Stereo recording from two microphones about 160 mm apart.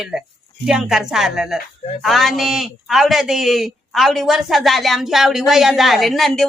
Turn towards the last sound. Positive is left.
turn(degrees=0)  # may be behind; listen again after turning